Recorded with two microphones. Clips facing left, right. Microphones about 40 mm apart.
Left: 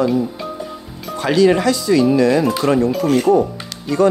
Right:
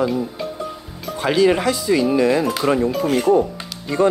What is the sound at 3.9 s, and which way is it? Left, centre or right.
Speech, right.